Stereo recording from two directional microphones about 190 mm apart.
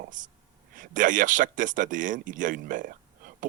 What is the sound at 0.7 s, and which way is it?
Speech, 45° right (ahead or behind).